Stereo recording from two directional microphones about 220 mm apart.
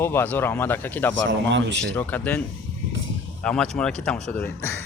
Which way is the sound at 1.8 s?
10° left (ahead or behind).